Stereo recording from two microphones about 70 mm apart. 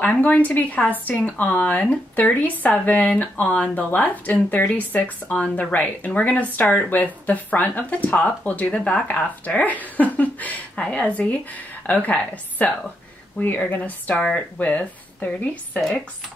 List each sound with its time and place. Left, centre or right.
0.0 s speech: left